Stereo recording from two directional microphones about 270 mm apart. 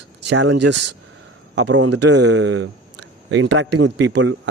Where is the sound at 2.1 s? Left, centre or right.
Right.